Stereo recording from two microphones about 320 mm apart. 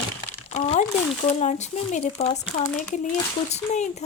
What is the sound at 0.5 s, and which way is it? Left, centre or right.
Crumpling, left.